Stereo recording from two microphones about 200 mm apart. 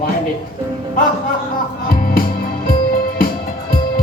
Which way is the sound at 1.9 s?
45° left (ahead or behind).